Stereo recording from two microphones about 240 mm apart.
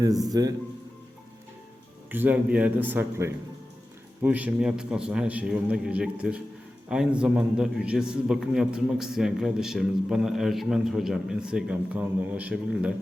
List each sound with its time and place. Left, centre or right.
0.3 s a man's voice: centre
2.0 s a man's voice: centre